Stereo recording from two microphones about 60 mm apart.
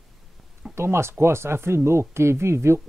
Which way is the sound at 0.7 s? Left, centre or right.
Right.